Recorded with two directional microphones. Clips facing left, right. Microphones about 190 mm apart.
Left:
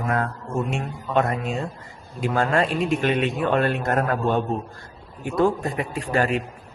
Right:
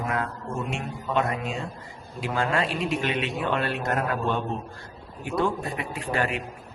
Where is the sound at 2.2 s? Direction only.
45° left (ahead or behind).